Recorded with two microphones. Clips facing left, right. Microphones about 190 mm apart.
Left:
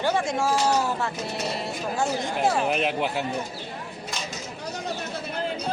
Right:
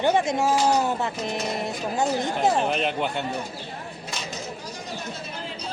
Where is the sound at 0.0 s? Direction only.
20° right (ahead or behind).